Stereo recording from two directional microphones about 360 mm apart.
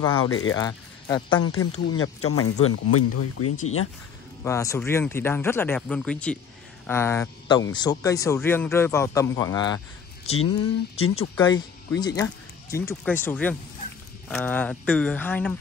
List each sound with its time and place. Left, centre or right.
0.0 s speech: centre
0.3 s speech: left
0.6 s speech: centre
1.4 s speech: left
4.5 s speech: centre
10.4 s speech: left
11.3 s speech: centre